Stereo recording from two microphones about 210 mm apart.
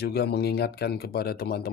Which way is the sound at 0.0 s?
50° left (ahead or behind).